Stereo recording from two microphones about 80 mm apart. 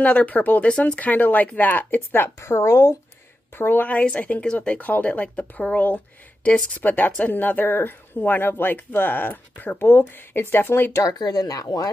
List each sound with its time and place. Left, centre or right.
0.0 s a woman's voice: centre
2.4 s speech: left
3.5 s a woman's voice: left
10.9 s speech: left